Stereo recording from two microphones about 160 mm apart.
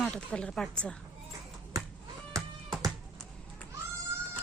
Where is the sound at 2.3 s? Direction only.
20° right (ahead or behind).